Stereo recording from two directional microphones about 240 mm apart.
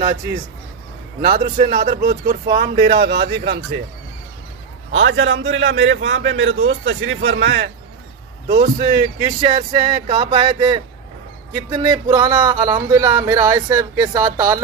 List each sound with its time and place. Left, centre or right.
1.2 s a man's voice: right
4.9 s a man's voice: right
8.5 s speech: right
9.4 s a sound: right
11.5 s speech: centre